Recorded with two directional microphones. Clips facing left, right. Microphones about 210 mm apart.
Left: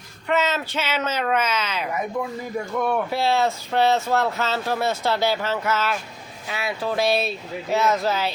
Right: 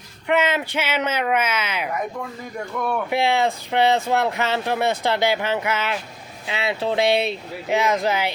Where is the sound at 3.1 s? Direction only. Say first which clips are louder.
Right 1 dB; 15° right (ahead or behind).